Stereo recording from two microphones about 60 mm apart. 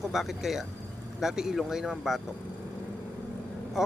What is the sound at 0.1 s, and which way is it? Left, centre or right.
Speech, centre.